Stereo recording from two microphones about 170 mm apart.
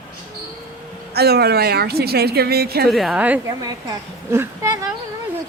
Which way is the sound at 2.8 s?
Centre (ahead or behind).